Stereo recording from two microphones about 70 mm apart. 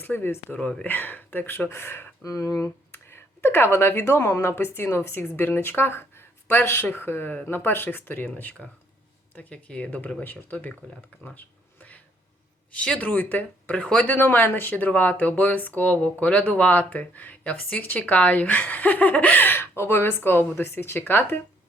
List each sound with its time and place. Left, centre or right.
0.0 s speech: left
2.2 s speech: left
2.9 s speech: left
11.3 s a sound: left
12.7 s speech: centre